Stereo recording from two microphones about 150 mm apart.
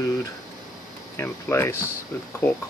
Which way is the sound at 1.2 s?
15° left (ahead or behind).